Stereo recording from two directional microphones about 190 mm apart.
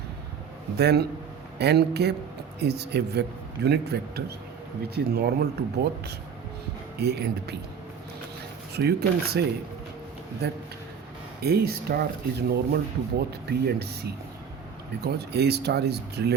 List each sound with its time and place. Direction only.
0.8 s speech: 60° right (ahead or behind)
7.0 s speech: 60° right (ahead or behind)
8.7 s speech: 55° right (ahead or behind)
11.3 s speech: 55° right (ahead or behind)